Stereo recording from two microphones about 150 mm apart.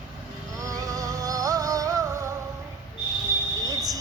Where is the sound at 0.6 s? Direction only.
25° right (ahead or behind).